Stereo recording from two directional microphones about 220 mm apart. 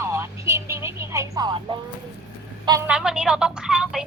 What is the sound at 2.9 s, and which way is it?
Speech, 5° right (ahead or behind).